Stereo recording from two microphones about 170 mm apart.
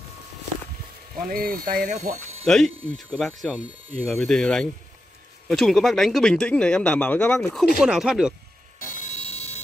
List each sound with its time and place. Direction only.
1.3 s speech: 60° right (ahead or behind); by 2.4 s 40° right (ahead or behind)
2.4 s speech: centre (ahead or behind)
8.9 s fire alarm: 40° left (ahead or behind)